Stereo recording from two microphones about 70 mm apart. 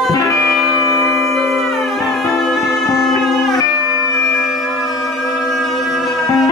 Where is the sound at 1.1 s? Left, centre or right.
Centre.